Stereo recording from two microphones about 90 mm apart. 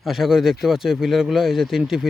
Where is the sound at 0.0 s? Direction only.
5° right (ahead or behind).